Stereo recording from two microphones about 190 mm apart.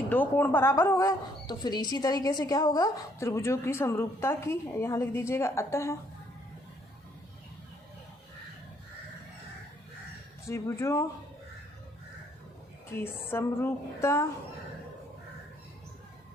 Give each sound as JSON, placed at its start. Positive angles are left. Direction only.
{"t": 0.1, "sound": "speech", "side_deg": 10}
{"t": 10.5, "sound": "speech", "side_deg": 15}
{"t": 13.3, "sound": "speech", "side_deg": 15}